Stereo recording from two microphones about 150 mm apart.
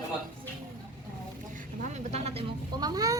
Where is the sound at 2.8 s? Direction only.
25° right (ahead or behind).